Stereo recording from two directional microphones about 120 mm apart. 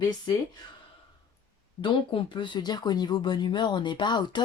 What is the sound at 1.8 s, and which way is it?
Speech, 40° left (ahead or behind).